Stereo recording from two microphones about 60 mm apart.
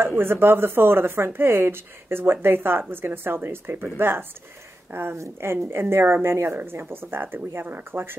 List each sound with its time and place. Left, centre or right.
0.0 s speech: right
5.1 s a woman's voice: right